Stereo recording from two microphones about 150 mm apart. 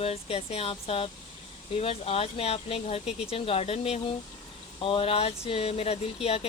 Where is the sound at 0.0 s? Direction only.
40° left (ahead or behind).